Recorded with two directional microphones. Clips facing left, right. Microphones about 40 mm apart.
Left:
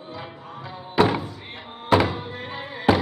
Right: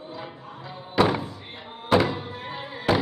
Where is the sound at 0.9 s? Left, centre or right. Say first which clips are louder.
Left 2 dB; centre.